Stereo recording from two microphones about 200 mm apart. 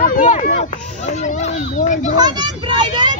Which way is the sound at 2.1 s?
20° right (ahead or behind).